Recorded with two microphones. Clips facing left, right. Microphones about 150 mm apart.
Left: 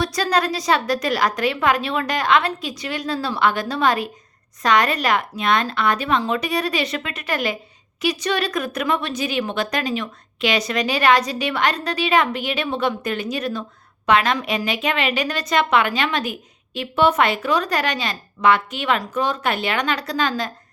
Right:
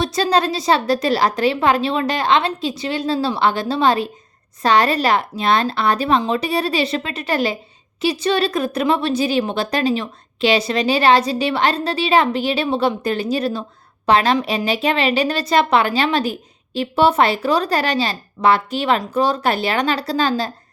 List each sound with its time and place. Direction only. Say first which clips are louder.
0.0 s a woman's voice: right 3 dB; 25° right (ahead or behind)